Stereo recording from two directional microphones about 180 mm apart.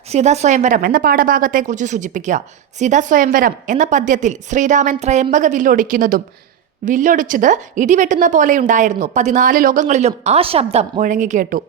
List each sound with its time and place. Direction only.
0.1 s speech: 40° right (ahead or behind)